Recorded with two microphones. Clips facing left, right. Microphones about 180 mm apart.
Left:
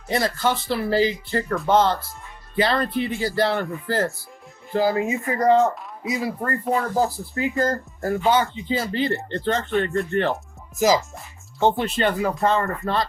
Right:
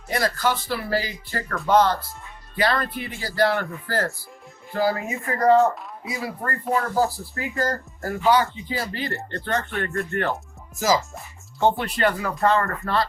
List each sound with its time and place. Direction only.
0.1 s speech: 25° left (ahead or behind)